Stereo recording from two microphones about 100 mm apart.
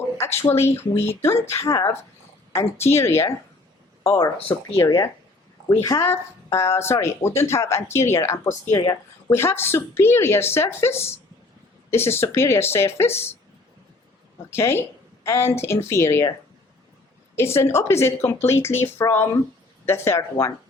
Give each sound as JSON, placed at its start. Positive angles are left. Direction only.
{"t": 0.4, "sound": "speech", "side_deg": 25}
{"t": 4.4, "sound": "speech", "side_deg": 75}
{"t": 4.8, "sound": "speech", "side_deg": 30}
{"t": 14.5, "sound": "speech", "side_deg": 25}
{"t": 17.3, "sound": "speech", "side_deg": 25}